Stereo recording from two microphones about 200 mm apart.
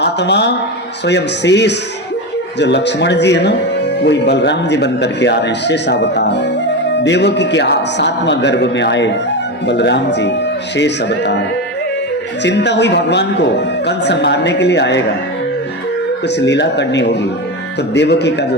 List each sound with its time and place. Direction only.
0.0 s speech: 55° left (ahead or behind)
16.2 s speech: 60° left (ahead or behind)